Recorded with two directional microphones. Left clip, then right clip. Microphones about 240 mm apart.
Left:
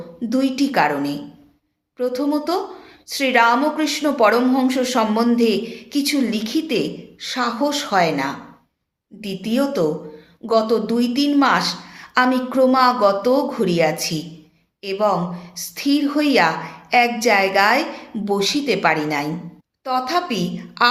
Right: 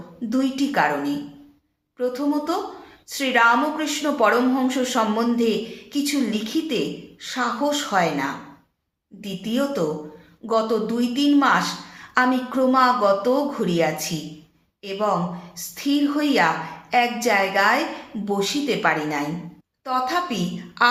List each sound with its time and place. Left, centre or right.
0.3 s a woman's voice: left